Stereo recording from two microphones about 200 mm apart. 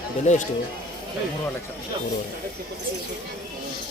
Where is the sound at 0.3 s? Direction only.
35° left (ahead or behind).